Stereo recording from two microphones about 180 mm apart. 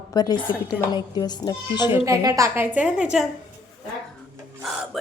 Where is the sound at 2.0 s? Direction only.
20° right (ahead or behind).